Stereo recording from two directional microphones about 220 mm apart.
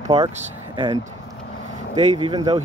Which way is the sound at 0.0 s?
20° right (ahead or behind).